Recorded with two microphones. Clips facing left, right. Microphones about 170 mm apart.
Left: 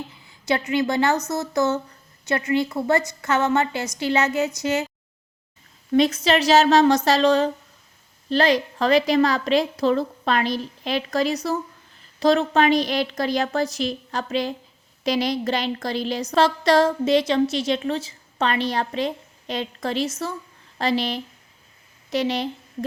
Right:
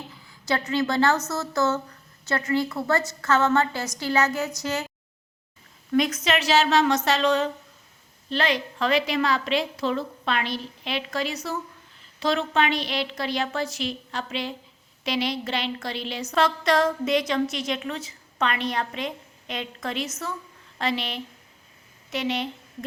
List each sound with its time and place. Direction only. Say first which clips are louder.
0.2 s a woman's voice: left 3 dB; 20° left (ahead or behind)
5.9 s a woman's voice: left 4 dB; 30° left (ahead or behind)